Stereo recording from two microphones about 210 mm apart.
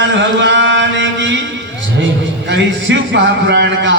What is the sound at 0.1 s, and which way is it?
Chant, 60° right (ahead or behind).